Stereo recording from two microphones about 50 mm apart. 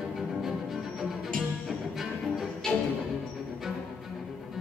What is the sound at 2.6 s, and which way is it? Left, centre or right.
Music, centre.